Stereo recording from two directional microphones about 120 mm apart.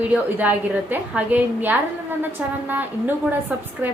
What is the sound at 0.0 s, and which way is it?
A woman's voice, 15° right (ahead or behind).